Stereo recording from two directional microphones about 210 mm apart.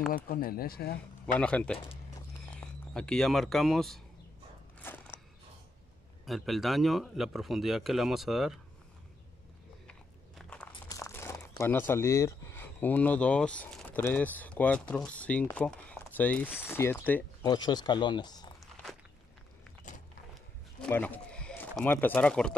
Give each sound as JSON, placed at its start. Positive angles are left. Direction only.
{"t": 0.1, "sound": "speech", "side_deg": 45}
{"t": 1.4, "sound": "a man's voice", "side_deg": 5}
{"t": 4.7, "sound": "a sound", "side_deg": 10}
{"t": 6.2, "sound": "speech", "side_deg": 0}
{"t": 9.8, "sound": "biting", "side_deg": 5}
{"t": 10.9, "sound": "speech", "side_deg": 15}
{"t": 17.4, "sound": "speech", "side_deg": 20}
{"t": 18.7, "sound": "walk", "side_deg": 0}
{"t": 20.8, "sound": "speech", "side_deg": 5}